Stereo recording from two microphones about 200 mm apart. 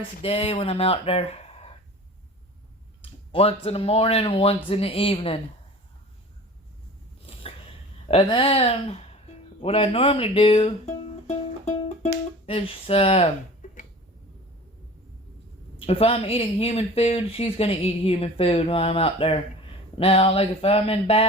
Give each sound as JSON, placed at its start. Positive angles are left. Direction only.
{"t": 0.2, "sound": "speech", "side_deg": 30}
{"t": 3.0, "sound": "speech", "side_deg": 30}
{"t": 8.0, "sound": "music", "side_deg": 25}
{"t": 15.9, "sound": "speech", "side_deg": 30}